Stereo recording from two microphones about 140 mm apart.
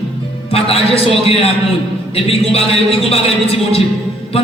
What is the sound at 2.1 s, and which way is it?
A man's voice, 45° left (ahead or behind).